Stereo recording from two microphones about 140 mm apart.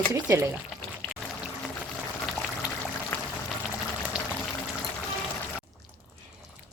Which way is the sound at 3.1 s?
10° left (ahead or behind).